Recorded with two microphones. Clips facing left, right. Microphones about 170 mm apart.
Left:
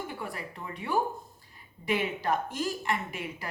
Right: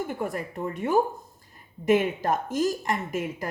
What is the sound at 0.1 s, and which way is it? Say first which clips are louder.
A woman's voice: right 8 dB; 45° right (ahead or behind).